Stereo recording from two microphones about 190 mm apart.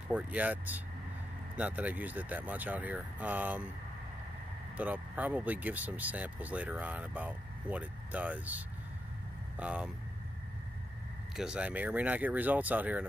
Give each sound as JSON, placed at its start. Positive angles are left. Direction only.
{"t": 0.1, "sound": "speech", "side_deg": -10}
{"t": 4.7, "sound": "speech", "side_deg": -10}
{"t": 11.3, "sound": "speech", "side_deg": -5}